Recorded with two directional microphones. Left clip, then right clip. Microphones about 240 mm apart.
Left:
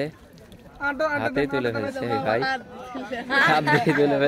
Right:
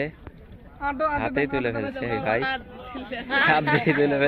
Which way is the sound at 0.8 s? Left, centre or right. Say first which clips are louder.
Left 1 dB; left.